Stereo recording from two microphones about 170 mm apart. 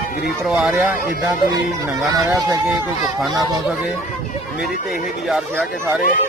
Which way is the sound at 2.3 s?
15° right (ahead or behind).